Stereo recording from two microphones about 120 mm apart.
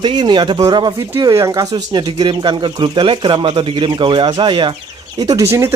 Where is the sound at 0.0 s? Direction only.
40° right (ahead or behind).